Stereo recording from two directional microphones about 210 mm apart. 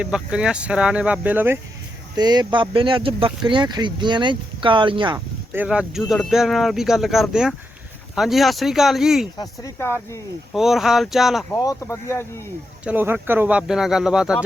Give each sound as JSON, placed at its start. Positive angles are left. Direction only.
{"t": 0.0, "sound": "speech", "side_deg": -5}
{"t": 2.1, "sound": "speech", "side_deg": -20}
{"t": 5.5, "sound": "speech", "side_deg": -5}
{"t": 9.4, "sound": "speech", "side_deg": 15}
{"t": 10.5, "sound": "speech", "side_deg": 0}
{"t": 11.5, "sound": "speech", "side_deg": 15}
{"t": 12.8, "sound": "speech", "side_deg": -10}